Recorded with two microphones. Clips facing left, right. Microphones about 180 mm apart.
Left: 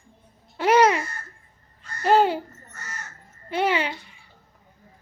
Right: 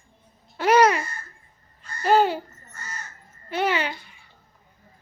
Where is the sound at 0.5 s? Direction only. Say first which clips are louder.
Even; 25° left (ahead or behind).